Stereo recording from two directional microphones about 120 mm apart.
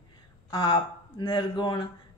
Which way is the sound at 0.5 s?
40° left (ahead or behind).